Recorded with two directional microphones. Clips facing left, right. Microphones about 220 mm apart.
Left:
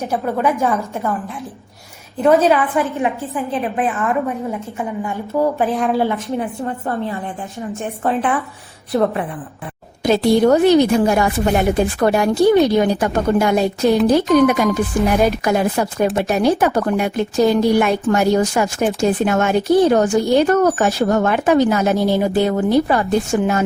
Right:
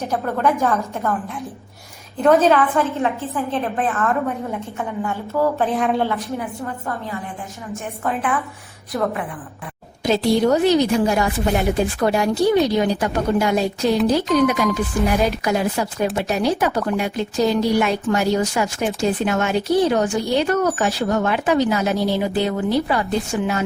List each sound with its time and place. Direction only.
0.0 s a woman's voice: 10° left (ahead or behind)
2.2 s a woman's voice: 10° left (ahead or behind)
5.6 s speech: centre (ahead or behind)
6.3 s a woman's voice: 30° left (ahead or behind)
10.0 s speech: 55° left (ahead or behind)